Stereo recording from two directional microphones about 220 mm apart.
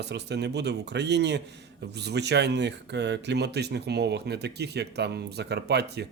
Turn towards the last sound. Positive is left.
turn(degrees=-50)  # may be behind; listen again after turning